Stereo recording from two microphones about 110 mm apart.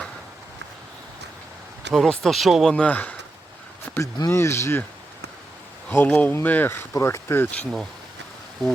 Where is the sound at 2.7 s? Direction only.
15° left (ahead or behind).